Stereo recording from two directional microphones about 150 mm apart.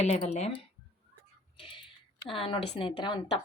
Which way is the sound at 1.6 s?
35° left (ahead or behind).